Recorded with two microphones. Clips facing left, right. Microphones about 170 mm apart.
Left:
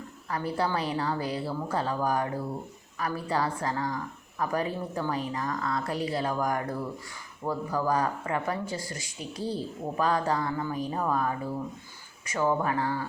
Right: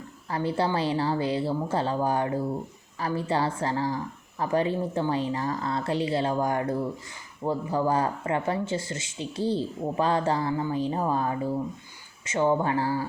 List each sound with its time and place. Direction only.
0.3 s speech: 25° right (ahead or behind)